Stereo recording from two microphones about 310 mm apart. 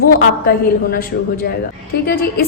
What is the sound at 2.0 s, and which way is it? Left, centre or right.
Speech, left.